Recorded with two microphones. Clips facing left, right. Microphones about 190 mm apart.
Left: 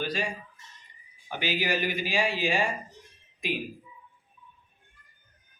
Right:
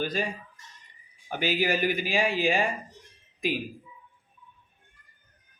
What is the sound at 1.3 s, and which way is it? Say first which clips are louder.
Speech: right 3 dB; 45° right (ahead or behind).